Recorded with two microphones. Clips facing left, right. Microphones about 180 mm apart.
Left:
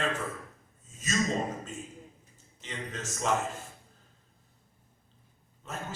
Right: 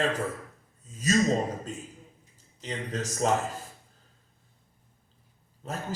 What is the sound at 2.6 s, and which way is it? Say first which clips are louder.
Speech: right 6 dB; 40° right (ahead or behind).